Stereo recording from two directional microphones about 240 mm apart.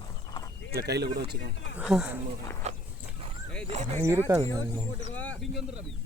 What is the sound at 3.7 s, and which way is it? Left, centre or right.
Speech, right.